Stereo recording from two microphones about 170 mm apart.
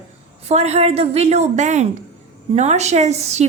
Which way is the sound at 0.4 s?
40° right (ahead or behind).